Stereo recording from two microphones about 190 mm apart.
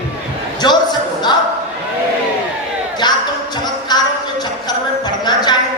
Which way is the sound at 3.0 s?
25° left (ahead or behind).